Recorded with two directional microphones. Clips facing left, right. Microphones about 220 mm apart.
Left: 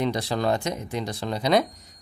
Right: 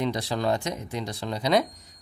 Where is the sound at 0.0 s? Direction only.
60° left (ahead or behind).